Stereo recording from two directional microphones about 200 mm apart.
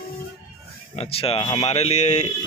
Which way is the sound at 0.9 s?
30° left (ahead or behind).